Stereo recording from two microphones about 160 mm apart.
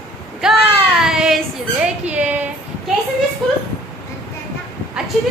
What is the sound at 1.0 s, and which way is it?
Child singing, 5° right (ahead or behind).